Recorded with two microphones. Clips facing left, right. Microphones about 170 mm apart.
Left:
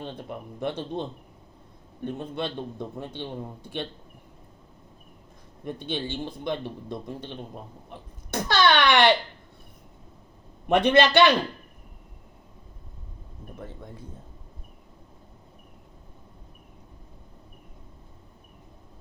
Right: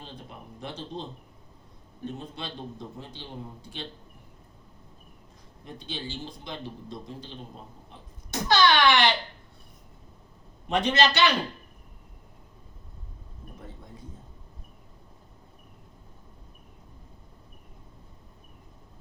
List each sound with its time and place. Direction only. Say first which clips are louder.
0.0 s a man's voice: left 8 dB; 60° left (ahead or behind)
2.0 s a man's voice: left 6 dB; 60° left (ahead or behind)
5.6 s a man's voice: left 7 dB; 60° left (ahead or behind)
10.7 s a man's voice: left 5 dB; 55° left (ahead or behind)